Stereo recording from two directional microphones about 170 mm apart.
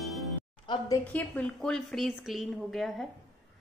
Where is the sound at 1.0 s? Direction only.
10° left (ahead or behind).